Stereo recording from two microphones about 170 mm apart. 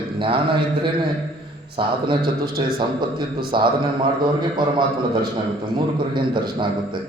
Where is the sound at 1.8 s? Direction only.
30° right (ahead or behind).